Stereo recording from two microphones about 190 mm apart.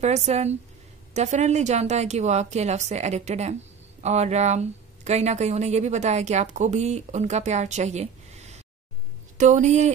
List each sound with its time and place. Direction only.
0.0 s speech: 35° right (ahead or behind)